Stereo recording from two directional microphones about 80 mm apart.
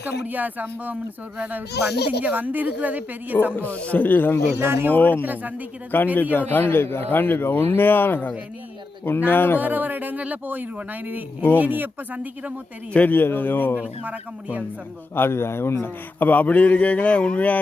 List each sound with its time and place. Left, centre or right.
0.3 s speech: right
3.5 s a man's voice: centre
4.5 s speech: right
4.9 s a man's voice: left
5.2 s speech: right
5.9 s a man's voice: left
9.6 s speech: right
12.9 s a man's voice: centre
13.7 s speech: centre
15.1 s a man's voice: left